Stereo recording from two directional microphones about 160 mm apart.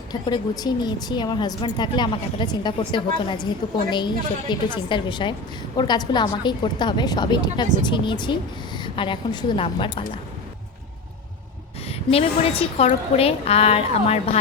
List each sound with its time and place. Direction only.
0.1 s a woman's voice: 25° left (ahead or behind)
11.9 s a woman's voice: 40° left (ahead or behind)